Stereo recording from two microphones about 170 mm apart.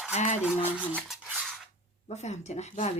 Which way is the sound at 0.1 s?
45° left (ahead or behind).